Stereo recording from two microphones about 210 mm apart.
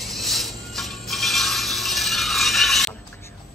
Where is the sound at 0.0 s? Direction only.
Centre (ahead or behind).